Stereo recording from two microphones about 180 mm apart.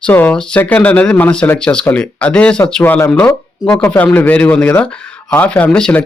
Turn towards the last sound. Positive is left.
turn(degrees=5)  # may be behind; listen again after turning